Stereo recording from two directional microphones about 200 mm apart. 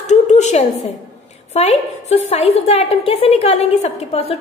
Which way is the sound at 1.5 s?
35° left (ahead or behind).